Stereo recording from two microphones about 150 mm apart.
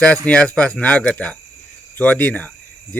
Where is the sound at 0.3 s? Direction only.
5° left (ahead or behind).